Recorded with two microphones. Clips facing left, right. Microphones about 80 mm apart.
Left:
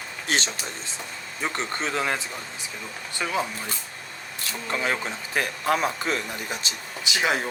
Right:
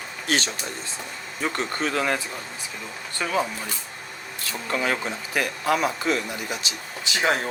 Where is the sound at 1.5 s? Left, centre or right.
Left.